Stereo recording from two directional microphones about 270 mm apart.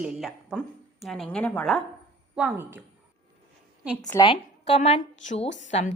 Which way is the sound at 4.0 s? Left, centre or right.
Centre.